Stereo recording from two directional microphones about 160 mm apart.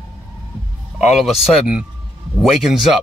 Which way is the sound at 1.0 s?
5° right (ahead or behind).